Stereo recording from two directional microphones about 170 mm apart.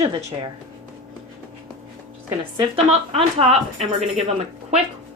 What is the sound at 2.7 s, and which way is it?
Speech, 35° right (ahead or behind).